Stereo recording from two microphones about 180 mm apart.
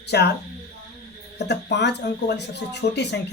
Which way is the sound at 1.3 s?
70° left (ahead or behind).